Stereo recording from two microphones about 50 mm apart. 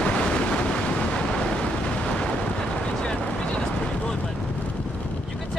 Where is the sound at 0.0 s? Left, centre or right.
Left.